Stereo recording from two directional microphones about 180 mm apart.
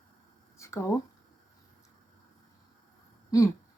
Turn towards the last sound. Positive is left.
turn(degrees=20)  # may be behind; listen again after turning